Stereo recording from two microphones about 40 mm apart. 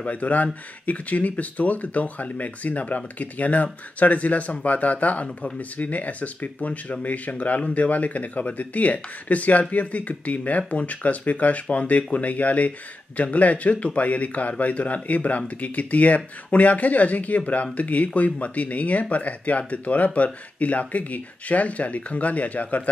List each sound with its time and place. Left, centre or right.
0.0 s speech: left